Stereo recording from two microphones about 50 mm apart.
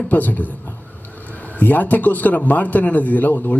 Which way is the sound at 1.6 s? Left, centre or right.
Left.